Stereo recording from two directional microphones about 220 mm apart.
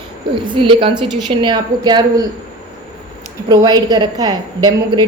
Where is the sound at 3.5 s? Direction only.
15° right (ahead or behind).